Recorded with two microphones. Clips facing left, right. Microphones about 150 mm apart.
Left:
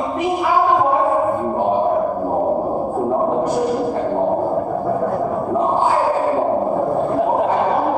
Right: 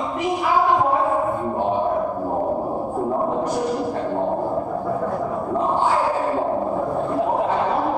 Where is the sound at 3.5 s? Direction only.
10° left (ahead or behind); by 5.1 s 30° left (ahead or behind).